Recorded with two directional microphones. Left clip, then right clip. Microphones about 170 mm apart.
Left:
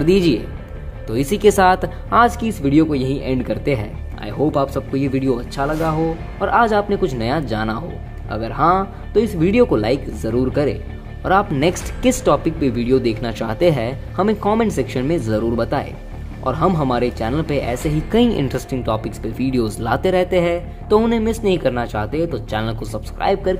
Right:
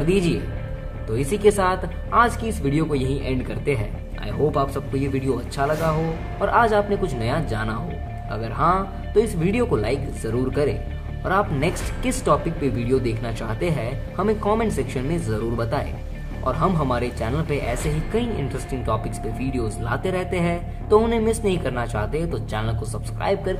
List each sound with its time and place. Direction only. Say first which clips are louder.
0.0 s speech: left 6 dB; 40° left (ahead or behind)
18.1 s speech: left 10 dB; 55° left (ahead or behind)
18.9 s speech: left 1 dB; 40° left (ahead or behind)